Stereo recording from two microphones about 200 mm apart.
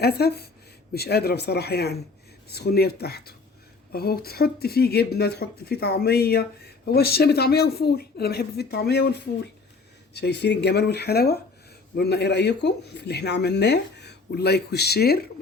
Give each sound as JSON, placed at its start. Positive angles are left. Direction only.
{"t": 0.0, "sound": "speech", "side_deg": 55}